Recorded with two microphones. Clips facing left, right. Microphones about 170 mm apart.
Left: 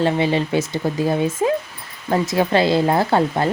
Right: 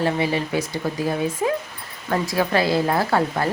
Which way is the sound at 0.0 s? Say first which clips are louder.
Left 3 dB; 25° left (ahead or behind).